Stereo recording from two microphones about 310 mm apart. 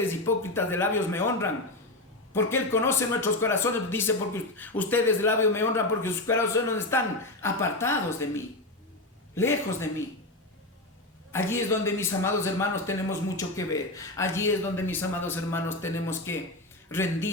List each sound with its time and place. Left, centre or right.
0.1 s a man's voice: centre
9.3 s a man's voice: centre
11.3 s a man's voice: centre